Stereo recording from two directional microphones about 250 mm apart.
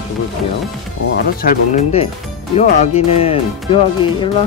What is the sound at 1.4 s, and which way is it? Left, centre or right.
Speech, left.